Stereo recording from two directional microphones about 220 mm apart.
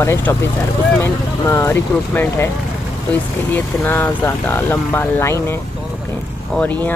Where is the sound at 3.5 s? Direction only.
10° left (ahead or behind).